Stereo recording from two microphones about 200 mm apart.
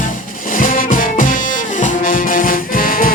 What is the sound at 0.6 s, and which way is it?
Music, 45° left (ahead or behind).